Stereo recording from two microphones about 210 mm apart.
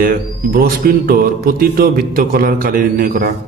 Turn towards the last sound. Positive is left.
turn(degrees=-45)  # may be behind; listen again after turning